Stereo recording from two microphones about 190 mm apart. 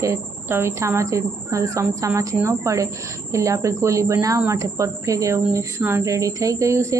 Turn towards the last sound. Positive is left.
turn(degrees=-15)  # may be behind; listen again after turning